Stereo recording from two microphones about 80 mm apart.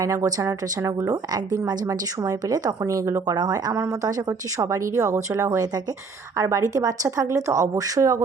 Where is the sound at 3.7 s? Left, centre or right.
Right.